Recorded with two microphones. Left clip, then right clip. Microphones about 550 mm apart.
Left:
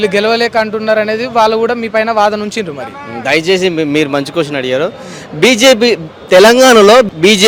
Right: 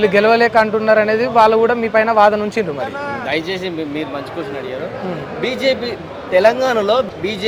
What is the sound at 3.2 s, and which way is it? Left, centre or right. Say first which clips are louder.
A man's voice: left 13 dB; left.